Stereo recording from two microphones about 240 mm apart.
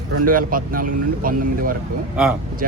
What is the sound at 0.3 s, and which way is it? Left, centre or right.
Speech, right.